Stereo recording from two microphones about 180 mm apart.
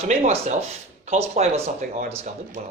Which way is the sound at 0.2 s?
40° right (ahead or behind).